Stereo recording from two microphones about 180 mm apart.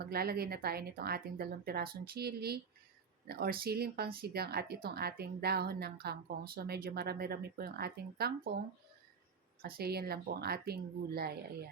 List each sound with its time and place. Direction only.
0.0 s a woman's voice: 60° right (ahead or behind)
9.6 s a woman's voice: 60° right (ahead or behind)